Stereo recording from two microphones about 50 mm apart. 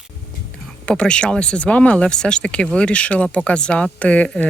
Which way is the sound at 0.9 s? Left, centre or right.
Centre.